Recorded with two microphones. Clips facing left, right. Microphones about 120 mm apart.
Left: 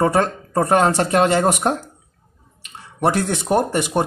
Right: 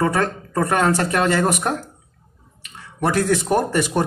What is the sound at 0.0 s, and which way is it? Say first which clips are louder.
Speech: left 3 dB; 30° left (ahead or behind).